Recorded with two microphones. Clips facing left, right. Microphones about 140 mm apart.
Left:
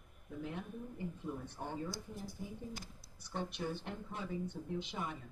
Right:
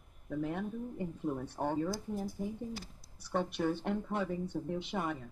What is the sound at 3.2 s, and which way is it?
Speech, 60° right (ahead or behind).